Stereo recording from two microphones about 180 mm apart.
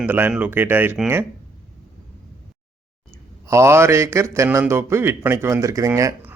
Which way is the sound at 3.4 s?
15° right (ahead or behind).